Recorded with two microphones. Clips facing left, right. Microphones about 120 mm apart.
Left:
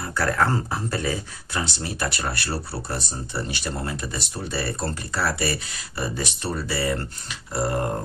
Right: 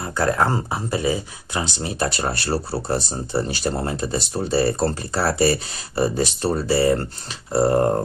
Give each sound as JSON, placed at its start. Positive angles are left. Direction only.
{"t": 0.0, "sound": "speech", "side_deg": -20}